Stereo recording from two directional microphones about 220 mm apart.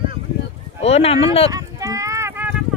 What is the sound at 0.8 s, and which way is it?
Speech, 30° left (ahead or behind).